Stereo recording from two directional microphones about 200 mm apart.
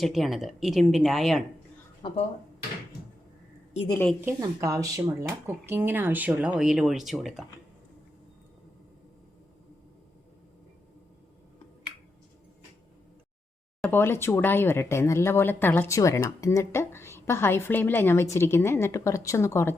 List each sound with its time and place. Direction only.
0.0 s speech: centre (ahead or behind)
2.0 s speech: 25° left (ahead or behind)
4.3 s speech: 15° right (ahead or behind)
13.8 s speech: 10° left (ahead or behind)